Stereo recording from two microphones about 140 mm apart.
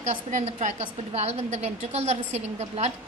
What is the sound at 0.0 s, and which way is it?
A woman's voice, 55° right (ahead or behind).